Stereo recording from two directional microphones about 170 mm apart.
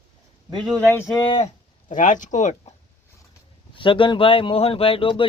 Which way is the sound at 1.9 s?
50° left (ahead or behind).